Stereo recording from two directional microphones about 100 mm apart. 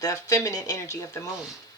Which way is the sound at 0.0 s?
30° left (ahead or behind).